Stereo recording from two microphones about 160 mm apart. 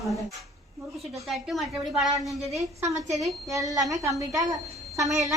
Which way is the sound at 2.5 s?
20° right (ahead or behind).